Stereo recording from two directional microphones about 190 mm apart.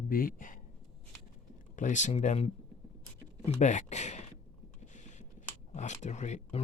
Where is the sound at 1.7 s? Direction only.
40° left (ahead or behind).